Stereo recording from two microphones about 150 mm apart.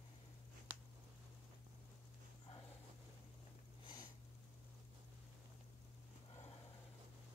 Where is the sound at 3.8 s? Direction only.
30° left (ahead or behind).